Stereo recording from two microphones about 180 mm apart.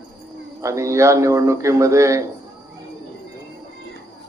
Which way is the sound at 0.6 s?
15° right (ahead or behind).